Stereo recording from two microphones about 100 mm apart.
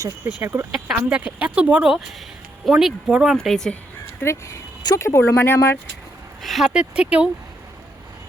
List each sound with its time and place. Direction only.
0.0 s speech: 25° right (ahead or behind)
0.7 s speech: 5° right (ahead or behind)
3.3 s speech: 5° left (ahead or behind)
4.2 s speech: 30° left (ahead or behind)
6.4 s speech: centre (ahead or behind)
6.7 s speech: 10° right (ahead or behind)